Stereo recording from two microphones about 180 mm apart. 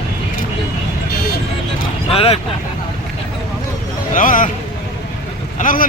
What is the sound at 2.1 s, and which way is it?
Speech, 30° left (ahead or behind).